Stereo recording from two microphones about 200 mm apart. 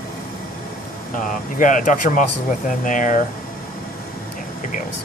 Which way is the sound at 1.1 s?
40° left (ahead or behind).